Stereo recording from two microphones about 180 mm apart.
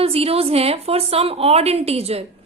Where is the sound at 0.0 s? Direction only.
35° right (ahead or behind).